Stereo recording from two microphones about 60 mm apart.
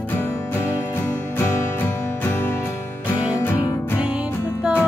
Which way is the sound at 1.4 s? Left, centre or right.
Left.